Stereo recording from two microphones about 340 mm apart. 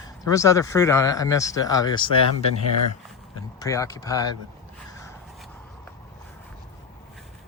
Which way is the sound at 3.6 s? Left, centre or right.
Centre.